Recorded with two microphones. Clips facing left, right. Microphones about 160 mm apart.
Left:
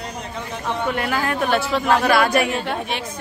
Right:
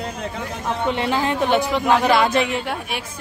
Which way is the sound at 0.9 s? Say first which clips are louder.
Right 3 dB; 25° right (ahead or behind).